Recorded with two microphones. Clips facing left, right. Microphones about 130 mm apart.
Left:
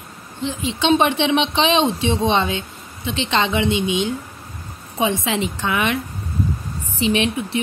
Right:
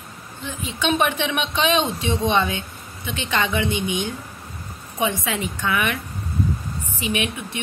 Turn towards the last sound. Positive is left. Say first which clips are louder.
# left 6 dB
turn(degrees=30)  # may be behind; listen again after turning